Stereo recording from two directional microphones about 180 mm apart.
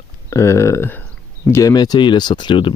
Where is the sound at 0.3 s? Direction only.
15° left (ahead or behind).